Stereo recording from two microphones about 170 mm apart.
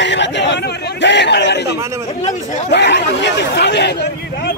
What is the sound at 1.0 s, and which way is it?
A man's voice, 90° left.